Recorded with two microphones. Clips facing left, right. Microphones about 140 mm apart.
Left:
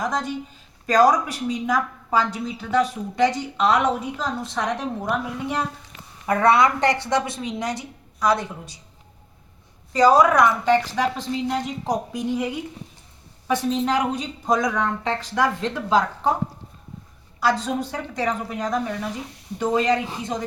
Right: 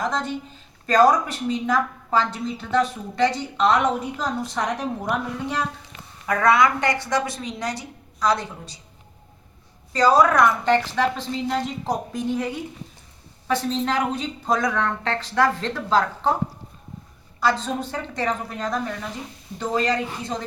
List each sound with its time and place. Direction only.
0.0 s a woman's voice: 10° left (ahead or behind)
5.4 s a woman's voice: 20° left (ahead or behind)
6.2 s a woman's voice: 30° left (ahead or behind)
9.9 s a woman's voice: 15° left (ahead or behind)
17.6 s a woman's voice: 10° left (ahead or behind)